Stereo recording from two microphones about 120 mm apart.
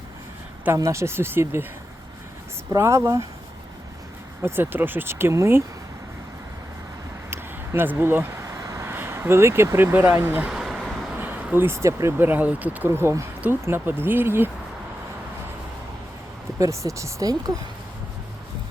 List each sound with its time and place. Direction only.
0.6 s speech: 25° right (ahead or behind)
2.7 s speech: 25° right (ahead or behind)
4.4 s speech: 20° right (ahead or behind)
7.3 s a sound: 20° right (ahead or behind)
10.5 s vehicle: 5° right (ahead or behind)
11.2 s speech: 15° right (ahead or behind)
16.6 s speech: 25° right (ahead or behind)